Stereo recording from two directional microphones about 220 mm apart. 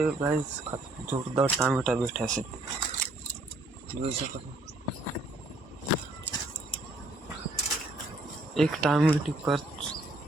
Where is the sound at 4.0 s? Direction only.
30° right (ahead or behind).